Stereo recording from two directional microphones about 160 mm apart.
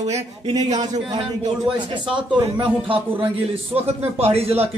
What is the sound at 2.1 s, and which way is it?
A man's voice, 30° right (ahead or behind).